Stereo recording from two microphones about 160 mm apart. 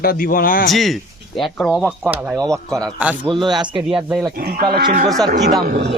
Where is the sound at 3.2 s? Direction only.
30° right (ahead or behind).